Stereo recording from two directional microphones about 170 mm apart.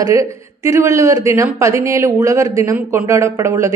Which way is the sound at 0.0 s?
20° right (ahead or behind).